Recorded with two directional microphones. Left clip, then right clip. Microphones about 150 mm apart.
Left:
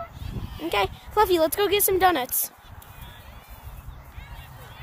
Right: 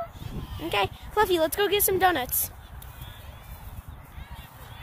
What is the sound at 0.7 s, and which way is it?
Speech, 15° left (ahead or behind).